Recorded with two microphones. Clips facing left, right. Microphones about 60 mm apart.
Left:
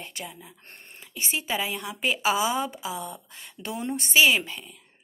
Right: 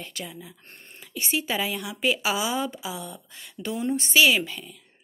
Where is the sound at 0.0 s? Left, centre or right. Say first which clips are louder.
Right 2 dB; left.